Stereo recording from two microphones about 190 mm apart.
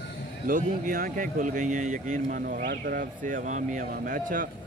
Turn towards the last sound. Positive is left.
turn(degrees=-45)  # may be behind; listen again after turning